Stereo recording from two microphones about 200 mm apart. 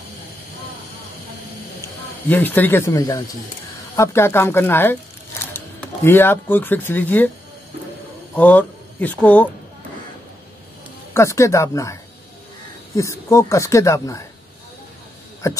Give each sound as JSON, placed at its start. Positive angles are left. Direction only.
{"t": 2.2, "sound": "speech", "side_deg": 10}
{"t": 6.0, "sound": "speech", "side_deg": 10}
{"t": 8.4, "sound": "speech", "side_deg": 10}
{"t": 11.1, "sound": "speech", "side_deg": 15}
{"t": 15.4, "sound": "speech", "side_deg": 15}